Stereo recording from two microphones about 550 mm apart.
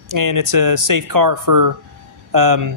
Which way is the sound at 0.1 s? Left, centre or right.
Right.